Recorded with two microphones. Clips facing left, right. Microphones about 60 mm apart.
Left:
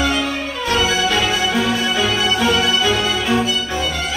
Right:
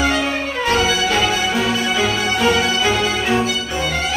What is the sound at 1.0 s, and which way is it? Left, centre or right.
Music, right.